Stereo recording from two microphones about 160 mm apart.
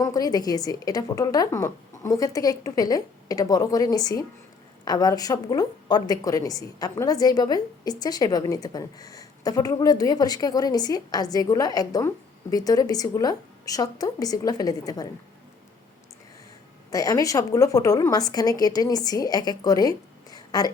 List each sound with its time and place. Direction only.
0.0 s a woman's voice: 25° left (ahead or behind)
16.9 s a woman's voice: 20° left (ahead or behind)